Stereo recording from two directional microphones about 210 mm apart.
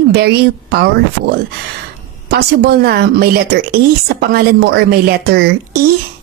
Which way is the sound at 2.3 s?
50° right (ahead or behind).